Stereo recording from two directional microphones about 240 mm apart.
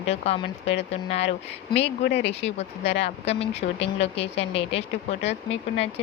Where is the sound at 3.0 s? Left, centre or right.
Left.